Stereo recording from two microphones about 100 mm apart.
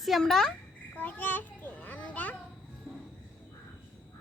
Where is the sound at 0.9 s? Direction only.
15° left (ahead or behind).